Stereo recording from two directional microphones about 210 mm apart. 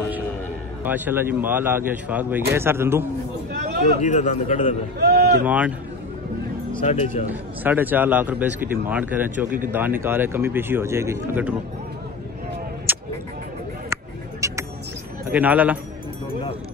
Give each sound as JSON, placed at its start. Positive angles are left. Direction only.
{"t": 0.8, "sound": "a man's voice", "side_deg": -10}
{"t": 3.5, "sound": "a sound", "side_deg": -50}
{"t": 4.0, "sound": "a man's voice", "side_deg": 35}
{"t": 4.9, "sound": "a sound", "side_deg": -50}
{"t": 5.4, "sound": "a man's voice", "side_deg": -5}
{"t": 6.8, "sound": "a man's voice", "side_deg": 30}
{"t": 7.6, "sound": "a man's voice", "side_deg": -10}
{"t": 12.9, "sound": "vehicle", "side_deg": -10}
{"t": 14.4, "sound": "music", "side_deg": -15}
{"t": 15.2, "sound": "a man's voice", "side_deg": -10}